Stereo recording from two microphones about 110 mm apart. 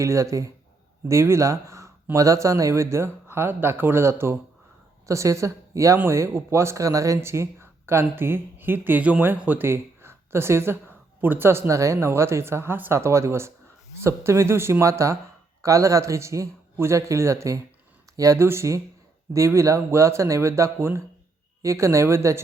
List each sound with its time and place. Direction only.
0.0 s a woman's voice: 30° right (ahead or behind)